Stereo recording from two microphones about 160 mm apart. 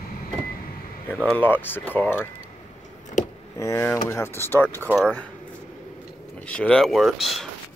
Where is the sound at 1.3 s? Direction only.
10° left (ahead or behind).